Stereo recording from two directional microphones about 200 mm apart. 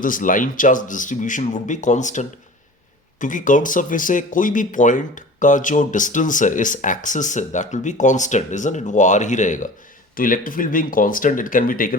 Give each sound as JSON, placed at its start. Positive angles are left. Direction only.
{"t": 0.0, "sound": "speech", "side_deg": 40}